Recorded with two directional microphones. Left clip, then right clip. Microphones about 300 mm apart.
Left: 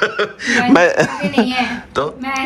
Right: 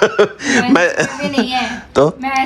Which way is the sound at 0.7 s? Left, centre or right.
Centre.